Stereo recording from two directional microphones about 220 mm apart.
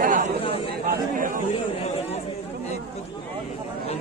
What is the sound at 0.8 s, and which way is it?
Chatter, 35° right (ahead or behind).